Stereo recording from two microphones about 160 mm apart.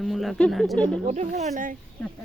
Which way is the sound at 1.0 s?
45° right (ahead or behind).